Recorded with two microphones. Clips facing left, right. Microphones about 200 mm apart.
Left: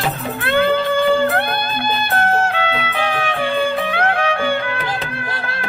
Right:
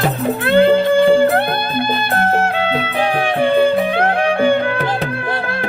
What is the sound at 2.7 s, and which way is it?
Music, 35° right (ahead or behind).